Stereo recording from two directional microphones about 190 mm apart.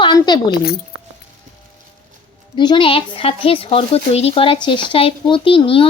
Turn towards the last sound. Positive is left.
turn(degrees=30)  # may be behind; listen again after turning